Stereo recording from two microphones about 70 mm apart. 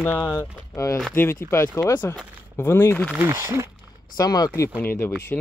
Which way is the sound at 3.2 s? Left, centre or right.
Right.